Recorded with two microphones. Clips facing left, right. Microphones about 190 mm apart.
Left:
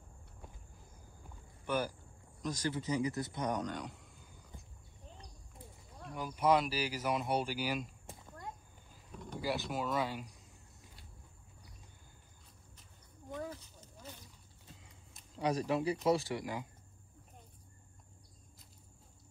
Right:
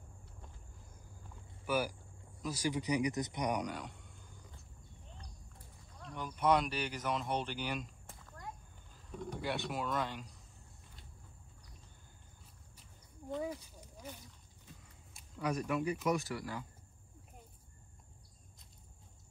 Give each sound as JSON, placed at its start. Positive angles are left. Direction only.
{"t": 1.7, "sound": "a man's voice", "side_deg": -10}
{"t": 3.8, "sound": "a sound", "side_deg": 0}
{"t": 6.1, "sound": "speech", "side_deg": 5}
{"t": 9.3, "sound": "speech", "side_deg": 0}
{"t": 13.3, "sound": "a sound", "side_deg": -10}
{"t": 15.4, "sound": "speech", "side_deg": 30}